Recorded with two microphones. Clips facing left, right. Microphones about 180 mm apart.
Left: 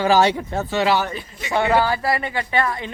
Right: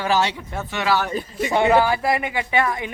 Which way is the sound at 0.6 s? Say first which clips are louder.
Left 3 dB; 35° left (ahead or behind).